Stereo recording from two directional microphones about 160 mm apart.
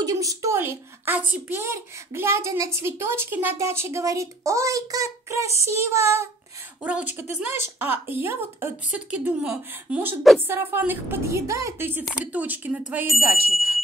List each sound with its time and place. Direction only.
0.0 s a woman's voice: 20° right (ahead or behind); by 13.2 s 5° right (ahead or behind)
13.2 s speech: 20° right (ahead or behind)